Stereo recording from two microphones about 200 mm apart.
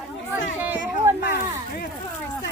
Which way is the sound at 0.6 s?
10° right (ahead or behind).